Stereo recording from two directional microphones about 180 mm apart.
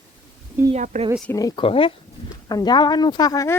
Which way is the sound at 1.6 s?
30° left (ahead or behind).